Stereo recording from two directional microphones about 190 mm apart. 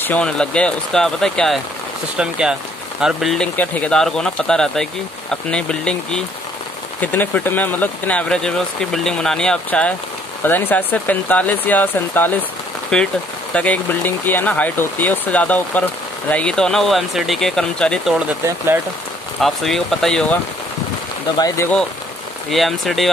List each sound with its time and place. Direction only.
0.0 s speech: 5° left (ahead or behind)
19.4 s speech: centre (ahead or behind)
21.4 s speech: 20° left (ahead or behind)
22.5 s speech: centre (ahead or behind)